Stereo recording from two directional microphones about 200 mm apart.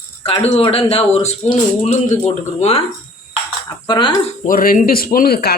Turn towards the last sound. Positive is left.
turn(degrees=50)  # may be behind; listen again after turning